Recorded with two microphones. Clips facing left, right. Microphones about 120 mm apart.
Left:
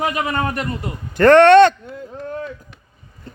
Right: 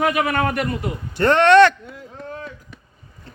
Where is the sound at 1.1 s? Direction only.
50° left (ahead or behind).